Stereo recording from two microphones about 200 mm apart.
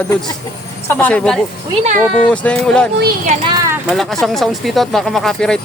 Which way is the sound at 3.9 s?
Centre (ahead or behind).